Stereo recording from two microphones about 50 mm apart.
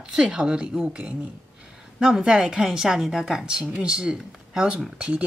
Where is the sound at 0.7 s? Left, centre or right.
Right.